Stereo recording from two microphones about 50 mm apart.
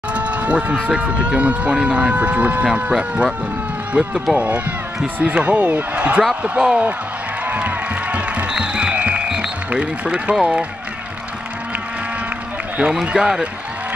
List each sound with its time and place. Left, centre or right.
0.1 s speech: right
7.4 s music: right
9.7 s speech: right
12.7 s speech: centre